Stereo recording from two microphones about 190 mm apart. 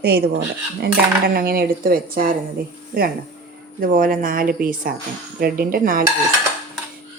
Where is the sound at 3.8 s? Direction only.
45° right (ahead or behind).